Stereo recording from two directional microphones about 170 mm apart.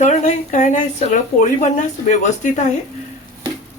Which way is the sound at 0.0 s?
45° left (ahead or behind).